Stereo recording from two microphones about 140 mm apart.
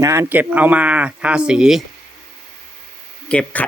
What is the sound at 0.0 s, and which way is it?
Speech, 20° right (ahead or behind).